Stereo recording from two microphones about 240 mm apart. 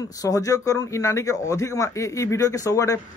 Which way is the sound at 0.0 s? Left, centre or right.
Centre.